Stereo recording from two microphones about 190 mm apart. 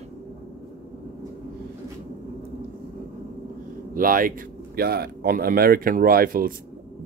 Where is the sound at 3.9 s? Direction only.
45° right (ahead or behind).